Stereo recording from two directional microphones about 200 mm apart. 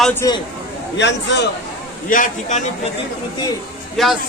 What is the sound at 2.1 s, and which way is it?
Speech, 40° left (ahead or behind).